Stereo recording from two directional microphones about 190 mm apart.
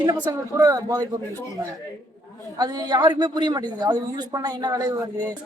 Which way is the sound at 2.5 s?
20° right (ahead or behind).